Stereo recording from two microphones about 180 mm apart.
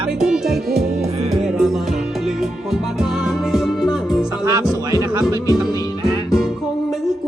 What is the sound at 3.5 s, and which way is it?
Music, centre (ahead or behind).